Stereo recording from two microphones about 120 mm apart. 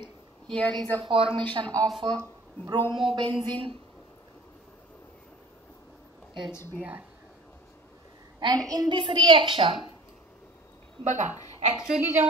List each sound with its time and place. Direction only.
0.5 s a woman's voice: 5° left (ahead or behind)
1.0 s a woman's voice: 45° right (ahead or behind)
6.8 s speech: 10° right (ahead or behind)
8.4 s a woman's voice: 35° right (ahead or behind)
11.1 s a woman's voice: 90° right
12.0 s a woman's voice: 20° right (ahead or behind)